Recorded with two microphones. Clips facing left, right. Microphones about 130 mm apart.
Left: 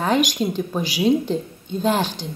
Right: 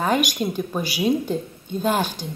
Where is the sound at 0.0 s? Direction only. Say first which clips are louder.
Left 2 dB; 10° right (ahead or behind).